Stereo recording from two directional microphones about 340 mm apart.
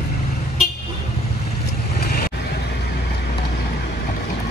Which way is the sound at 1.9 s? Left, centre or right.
Left.